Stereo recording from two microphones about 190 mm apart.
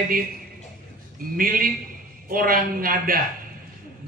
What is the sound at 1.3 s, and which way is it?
A man's voice, 50° right (ahead or behind).